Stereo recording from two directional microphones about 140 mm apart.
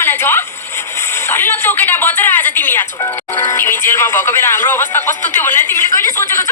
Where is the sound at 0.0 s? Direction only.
15° left (ahead or behind).